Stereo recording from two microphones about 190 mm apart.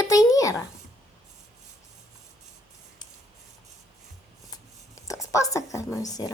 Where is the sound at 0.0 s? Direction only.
20° left (ahead or behind).